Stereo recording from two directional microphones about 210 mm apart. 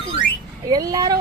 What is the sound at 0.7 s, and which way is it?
Speech, 15° right (ahead or behind).